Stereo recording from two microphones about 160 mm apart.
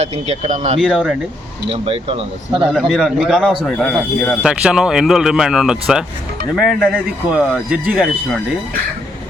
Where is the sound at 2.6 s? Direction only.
Centre (ahead or behind).